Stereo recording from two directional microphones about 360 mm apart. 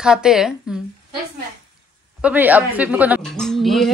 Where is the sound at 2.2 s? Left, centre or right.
Centre.